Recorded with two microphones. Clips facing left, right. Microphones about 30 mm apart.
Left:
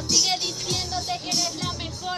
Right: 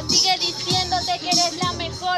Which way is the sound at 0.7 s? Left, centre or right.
Right.